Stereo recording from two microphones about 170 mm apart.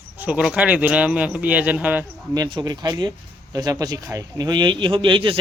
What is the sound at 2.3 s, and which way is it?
Speech, 25° right (ahead or behind).